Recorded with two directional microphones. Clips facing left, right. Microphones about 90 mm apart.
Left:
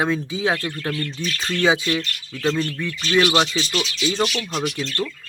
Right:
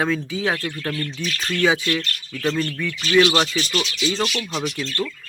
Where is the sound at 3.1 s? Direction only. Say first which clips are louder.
Right 1 dB; 15° left (ahead or behind).